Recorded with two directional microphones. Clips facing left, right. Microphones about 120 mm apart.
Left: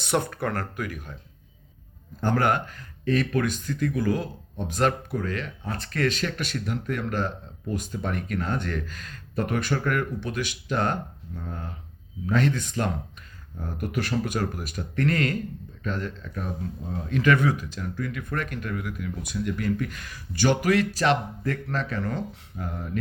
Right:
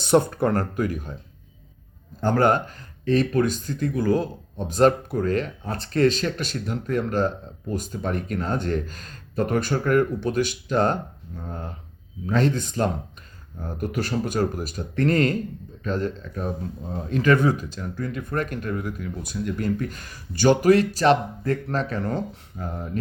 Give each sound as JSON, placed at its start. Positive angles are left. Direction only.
{"t": 0.0, "sound": "speech", "side_deg": -30}
{"t": 2.4, "sound": "speech", "side_deg": -35}
{"t": 12.2, "sound": "speech", "side_deg": -30}